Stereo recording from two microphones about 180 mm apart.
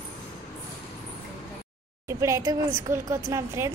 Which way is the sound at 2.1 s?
15° right (ahead or behind).